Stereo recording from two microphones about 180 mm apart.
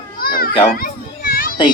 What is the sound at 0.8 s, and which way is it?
Children playing, 55° left (ahead or behind).